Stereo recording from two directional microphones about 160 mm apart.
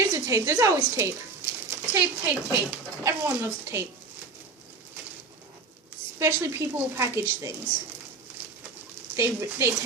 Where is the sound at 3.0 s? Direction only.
15° right (ahead or behind).